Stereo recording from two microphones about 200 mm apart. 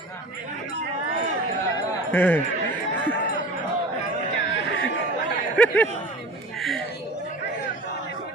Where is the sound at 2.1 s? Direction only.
10° left (ahead or behind).